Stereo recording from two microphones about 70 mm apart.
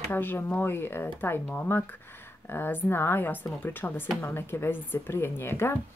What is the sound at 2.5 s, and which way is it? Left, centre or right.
Speech, left.